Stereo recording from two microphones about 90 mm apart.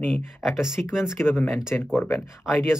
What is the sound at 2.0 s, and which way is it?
Speech, 25° left (ahead or behind).